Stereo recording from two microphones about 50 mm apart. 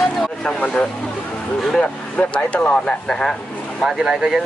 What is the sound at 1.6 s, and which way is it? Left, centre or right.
Speech, centre.